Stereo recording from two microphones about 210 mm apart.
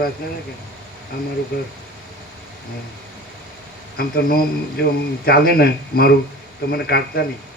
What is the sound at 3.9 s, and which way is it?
Speech, 45° left (ahead or behind).